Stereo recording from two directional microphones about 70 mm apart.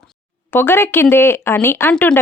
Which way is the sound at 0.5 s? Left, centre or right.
Left.